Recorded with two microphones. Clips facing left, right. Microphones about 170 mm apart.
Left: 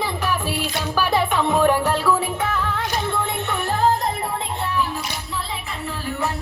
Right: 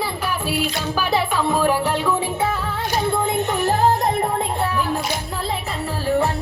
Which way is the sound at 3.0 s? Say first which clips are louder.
Right 4 dB; 40° right (ahead or behind).